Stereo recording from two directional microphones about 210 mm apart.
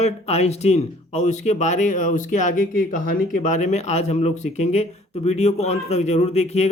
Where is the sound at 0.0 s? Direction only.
30° left (ahead or behind).